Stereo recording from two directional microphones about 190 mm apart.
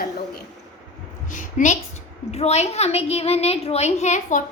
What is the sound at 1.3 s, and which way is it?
A woman's voice, 40° left (ahead or behind).